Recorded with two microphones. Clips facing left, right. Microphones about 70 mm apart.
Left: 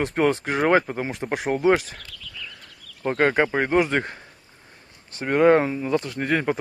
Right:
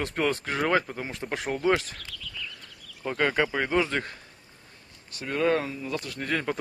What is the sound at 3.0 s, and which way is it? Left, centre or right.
Speech, left.